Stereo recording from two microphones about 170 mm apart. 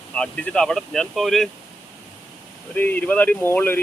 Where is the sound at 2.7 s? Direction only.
10° left (ahead or behind).